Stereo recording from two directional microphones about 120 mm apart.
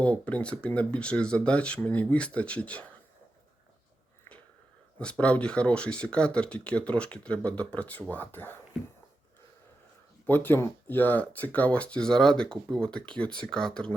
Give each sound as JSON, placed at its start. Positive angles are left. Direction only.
{"t": 0.0, "sound": "speech", "side_deg": 10}
{"t": 4.9, "sound": "speech", "side_deg": 10}
{"t": 10.2, "sound": "speech", "side_deg": 15}